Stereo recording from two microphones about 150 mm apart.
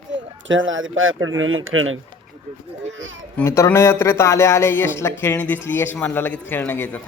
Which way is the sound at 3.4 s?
20° left (ahead or behind).